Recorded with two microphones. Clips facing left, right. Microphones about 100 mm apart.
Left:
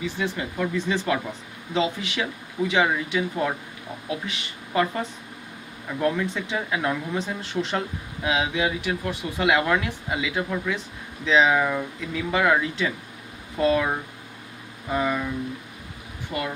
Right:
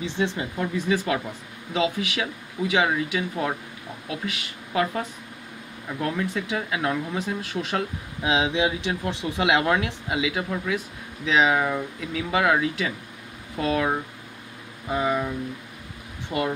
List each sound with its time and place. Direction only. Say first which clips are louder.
0.0 s speech: right 1 dB; 25° right (ahead or behind)
0.6 s speech: right 1 dB; 10° right (ahead or behind)
14.9 s speech: right 1 dB; 10° right (ahead or behind)
16.3 s speech: right 3 dB; 15° right (ahead or behind)